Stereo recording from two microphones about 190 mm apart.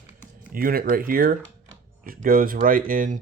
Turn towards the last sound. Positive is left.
turn(degrees=-45)  # may be behind; listen again after turning